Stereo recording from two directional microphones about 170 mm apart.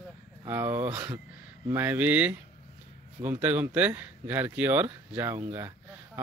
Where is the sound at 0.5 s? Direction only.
15° right (ahead or behind).